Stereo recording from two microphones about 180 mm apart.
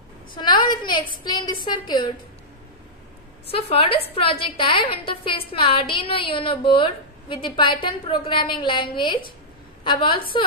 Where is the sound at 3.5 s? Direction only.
30° left (ahead or behind).